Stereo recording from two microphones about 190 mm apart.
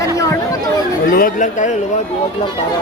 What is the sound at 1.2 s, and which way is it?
Speech, 40° left (ahead or behind).